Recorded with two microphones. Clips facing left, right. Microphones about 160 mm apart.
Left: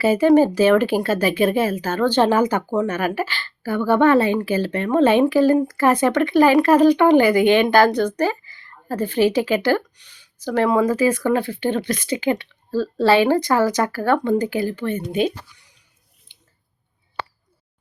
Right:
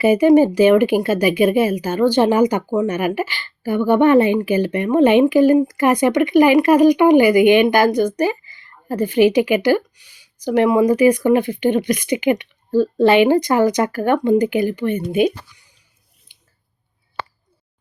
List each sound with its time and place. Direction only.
0.0 s speech: 15° right (ahead or behind)
16.3 s drip: 15° right (ahead or behind)